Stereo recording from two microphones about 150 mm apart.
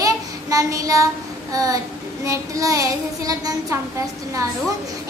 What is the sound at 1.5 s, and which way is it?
Speech, 25° right (ahead or behind).